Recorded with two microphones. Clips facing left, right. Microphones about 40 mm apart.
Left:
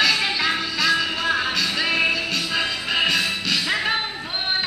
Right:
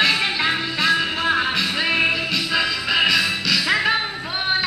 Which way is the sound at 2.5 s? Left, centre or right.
Right.